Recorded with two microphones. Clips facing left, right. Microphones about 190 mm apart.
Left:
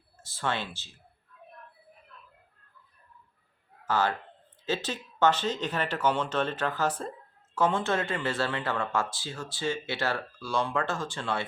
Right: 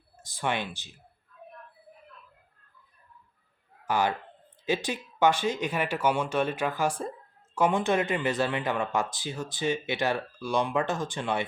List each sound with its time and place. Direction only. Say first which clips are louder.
0.2 s speech: right 2 dB; 15° right (ahead or behind)
3.8 s a man's voice: right 1 dB; 15° right (ahead or behind)